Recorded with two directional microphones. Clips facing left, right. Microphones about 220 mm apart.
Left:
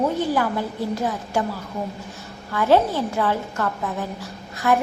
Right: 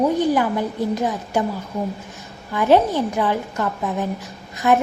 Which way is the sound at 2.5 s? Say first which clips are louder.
Right 2 dB; 15° right (ahead or behind).